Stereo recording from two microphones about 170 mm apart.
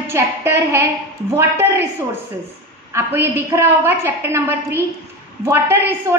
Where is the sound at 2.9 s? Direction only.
15° right (ahead or behind).